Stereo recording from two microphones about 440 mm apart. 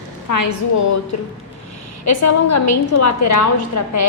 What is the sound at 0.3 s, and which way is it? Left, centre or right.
Speech, left.